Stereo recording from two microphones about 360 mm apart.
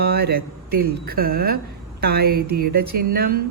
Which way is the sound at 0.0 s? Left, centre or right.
Right.